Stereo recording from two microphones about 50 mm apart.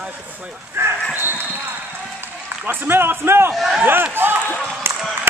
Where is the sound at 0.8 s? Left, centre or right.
Right.